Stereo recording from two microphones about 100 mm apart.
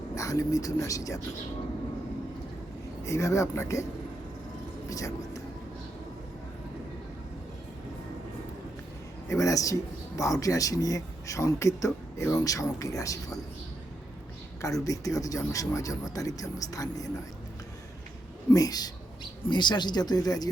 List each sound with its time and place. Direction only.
0.2 s speech: 35° left (ahead or behind)
3.0 s speech: 30° left (ahead or behind)
4.9 s speech: 35° left (ahead or behind)
9.3 s speech: 35° left (ahead or behind)
14.6 s speech: 35° left (ahead or behind)
18.5 s speech: 40° left (ahead or behind)